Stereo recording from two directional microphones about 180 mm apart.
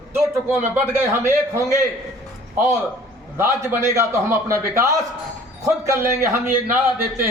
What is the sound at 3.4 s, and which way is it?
A man's voice, 15° right (ahead or behind).